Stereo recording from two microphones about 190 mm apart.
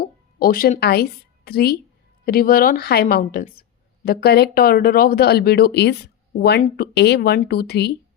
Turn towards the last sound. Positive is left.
turn(degrees=60)  # may be behind; listen again after turning